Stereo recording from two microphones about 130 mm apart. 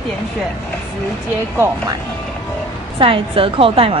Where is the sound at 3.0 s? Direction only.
45° right (ahead or behind).